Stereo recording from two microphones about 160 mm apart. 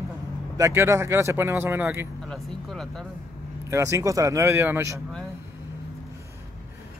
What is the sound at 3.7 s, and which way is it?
Speech, 20° right (ahead or behind).